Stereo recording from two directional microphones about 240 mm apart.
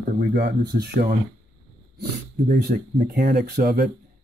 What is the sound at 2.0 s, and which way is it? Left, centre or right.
Speech, right.